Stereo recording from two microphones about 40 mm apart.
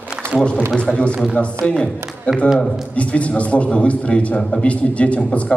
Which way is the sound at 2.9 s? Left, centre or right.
Left.